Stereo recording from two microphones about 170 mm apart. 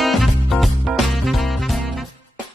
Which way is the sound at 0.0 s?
Centre (ahead or behind).